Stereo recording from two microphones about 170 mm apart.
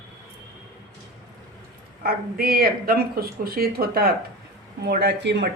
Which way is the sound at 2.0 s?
60° right (ahead or behind).